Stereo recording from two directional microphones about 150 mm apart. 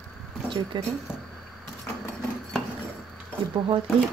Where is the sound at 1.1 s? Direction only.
5° right (ahead or behind).